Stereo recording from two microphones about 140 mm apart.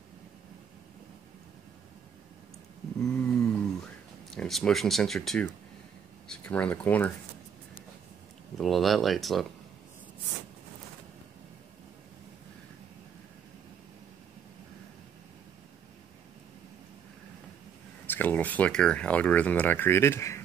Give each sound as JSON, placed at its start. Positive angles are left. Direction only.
{"t": 3.0, "sound": "a sound", "side_deg": 5}
{"t": 4.3, "sound": "speech", "side_deg": 0}
{"t": 8.5, "sound": "speech", "side_deg": 0}
{"t": 18.0, "sound": "speech", "side_deg": 15}